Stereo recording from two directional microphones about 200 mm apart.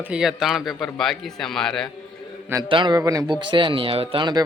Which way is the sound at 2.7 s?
25° right (ahead or behind).